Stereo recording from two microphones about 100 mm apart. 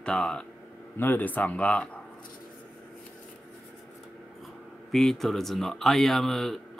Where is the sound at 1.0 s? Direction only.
20° left (ahead or behind).